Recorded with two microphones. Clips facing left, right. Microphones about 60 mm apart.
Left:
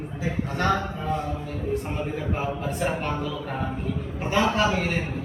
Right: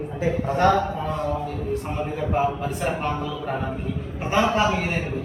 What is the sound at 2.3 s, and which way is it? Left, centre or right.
A man's voice, centre.